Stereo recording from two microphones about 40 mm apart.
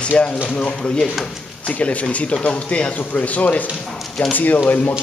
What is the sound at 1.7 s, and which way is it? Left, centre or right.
Speech, left.